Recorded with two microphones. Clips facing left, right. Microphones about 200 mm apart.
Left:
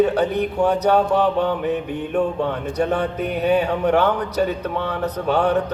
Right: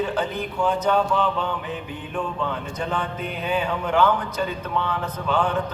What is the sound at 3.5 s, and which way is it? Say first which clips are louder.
Speech: left 6 dB; 40° left (ahead or behind).